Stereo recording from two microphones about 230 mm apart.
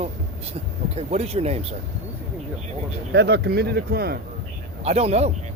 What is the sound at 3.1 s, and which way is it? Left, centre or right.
Speech, right.